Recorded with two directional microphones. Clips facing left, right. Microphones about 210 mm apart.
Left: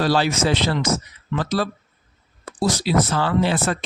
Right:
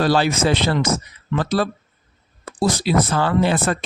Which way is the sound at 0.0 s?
55° right (ahead or behind).